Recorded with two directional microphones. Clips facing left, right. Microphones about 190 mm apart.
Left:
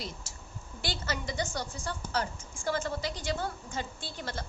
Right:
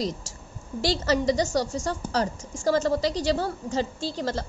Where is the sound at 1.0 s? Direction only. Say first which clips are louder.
Right 14 dB; 35° right (ahead or behind).